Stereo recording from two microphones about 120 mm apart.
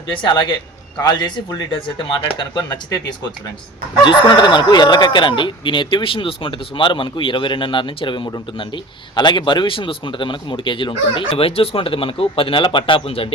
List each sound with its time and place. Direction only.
0.2 s a man's voice: 40° left (ahead or behind)
4.0 s speech: 40° left (ahead or behind)